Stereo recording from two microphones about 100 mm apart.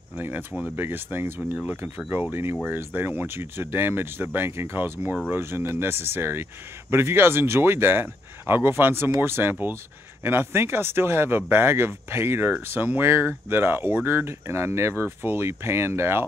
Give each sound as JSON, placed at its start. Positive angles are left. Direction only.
{"t": 0.2, "sound": "speech", "side_deg": -20}